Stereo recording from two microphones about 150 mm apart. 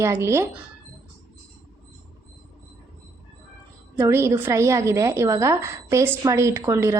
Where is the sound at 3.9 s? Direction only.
15° right (ahead or behind).